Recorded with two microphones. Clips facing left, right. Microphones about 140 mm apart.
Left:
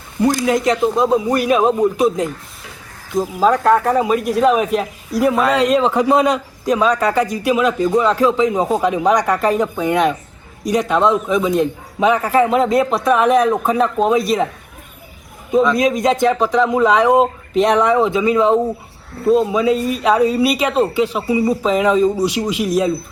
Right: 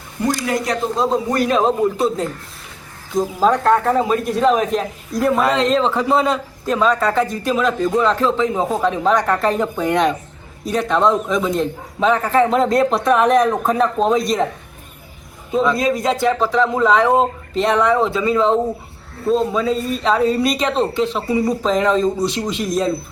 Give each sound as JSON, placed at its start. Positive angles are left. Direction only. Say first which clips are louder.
{"t": 0.4, "sound": "speech", "louder": "left 5 dB", "side_deg": 20}
{"t": 3.2, "sound": "a man's voice", "louder": "left 1 dB", "side_deg": 5}
{"t": 15.8, "sound": "speech", "louder": "left 3 dB", "side_deg": 20}